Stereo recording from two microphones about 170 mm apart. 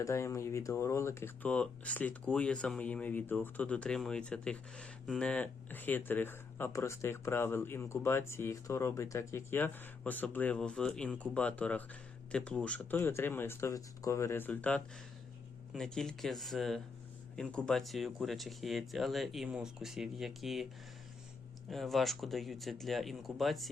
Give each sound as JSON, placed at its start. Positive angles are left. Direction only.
{"t": 0.0, "sound": "speech", "side_deg": 15}
{"t": 21.7, "sound": "speech", "side_deg": 0}